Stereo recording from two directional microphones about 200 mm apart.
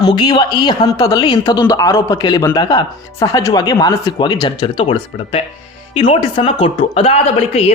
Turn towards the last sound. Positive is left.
turn(degrees=30)  # may be behind; listen again after turning